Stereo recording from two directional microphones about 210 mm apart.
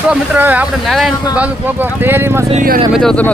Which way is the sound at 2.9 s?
5° left (ahead or behind).